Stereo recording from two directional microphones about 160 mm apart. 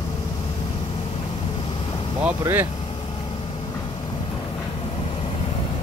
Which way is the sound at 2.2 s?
10° right (ahead or behind).